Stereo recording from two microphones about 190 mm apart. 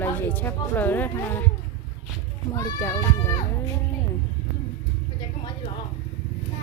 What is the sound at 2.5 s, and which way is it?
Speech, 15° left (ahead or behind).